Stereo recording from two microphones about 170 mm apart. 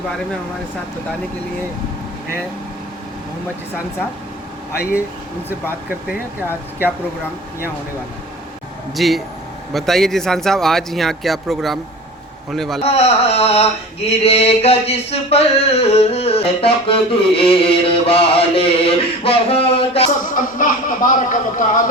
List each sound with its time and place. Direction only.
9.0 s speech: centre (ahead or behind)
12.8 s male singing: 40° left (ahead or behind)
20.1 s speech: 50° left (ahead or behind)